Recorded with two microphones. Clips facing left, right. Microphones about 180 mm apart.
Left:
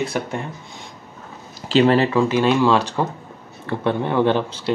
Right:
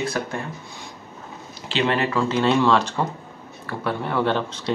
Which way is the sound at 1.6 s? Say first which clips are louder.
Left 7 dB; 40° left (ahead or behind).